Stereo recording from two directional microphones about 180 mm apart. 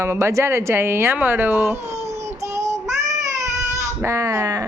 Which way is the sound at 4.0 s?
15° right (ahead or behind).